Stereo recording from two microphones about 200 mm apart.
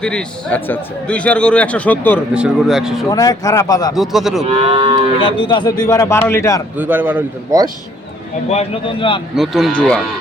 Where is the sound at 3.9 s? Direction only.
Centre (ahead or behind).